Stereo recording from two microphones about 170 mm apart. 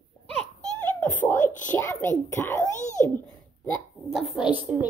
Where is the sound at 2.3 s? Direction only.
15° left (ahead or behind).